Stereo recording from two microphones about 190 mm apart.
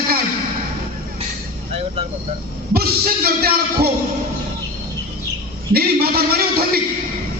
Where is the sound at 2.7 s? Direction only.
55° right (ahead or behind).